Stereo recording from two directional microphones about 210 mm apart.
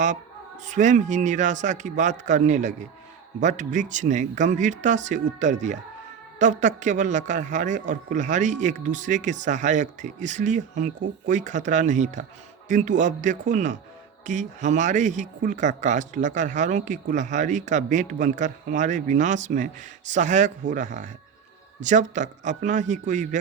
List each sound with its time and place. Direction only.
0.6 s speech: 35° right (ahead or behind)